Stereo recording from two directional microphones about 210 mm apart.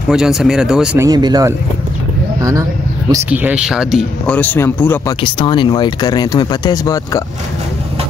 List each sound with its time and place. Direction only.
0.1 s speech: 5° right (ahead or behind)
1.0 s speech: 20° right (ahead or behind)
3.1 s speech: 10° right (ahead or behind)
4.4 s speech: 10° left (ahead or behind)
5.2 s speech: 25° left (ahead or behind)